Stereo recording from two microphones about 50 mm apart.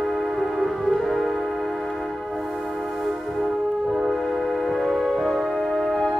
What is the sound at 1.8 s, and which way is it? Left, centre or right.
Tick-tock, centre.